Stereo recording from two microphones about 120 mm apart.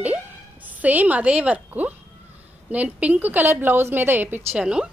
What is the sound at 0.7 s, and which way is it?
A woman's voice, 15° right (ahead or behind).